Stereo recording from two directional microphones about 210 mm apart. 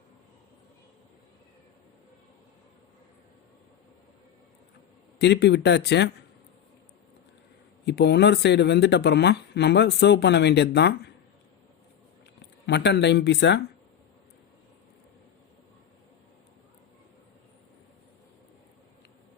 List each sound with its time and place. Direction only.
5.2 s speech: 55° left (ahead or behind)
7.9 s speech: 50° left (ahead or behind)
12.6 s speech: 55° left (ahead or behind)